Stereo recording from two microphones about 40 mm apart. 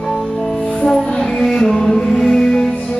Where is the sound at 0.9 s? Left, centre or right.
Centre.